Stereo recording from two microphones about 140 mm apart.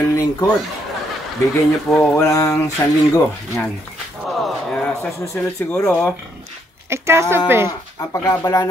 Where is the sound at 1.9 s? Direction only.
5° left (ahead or behind).